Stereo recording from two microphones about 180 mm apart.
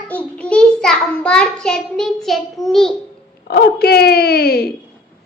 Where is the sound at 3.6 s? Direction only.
60° left (ahead or behind).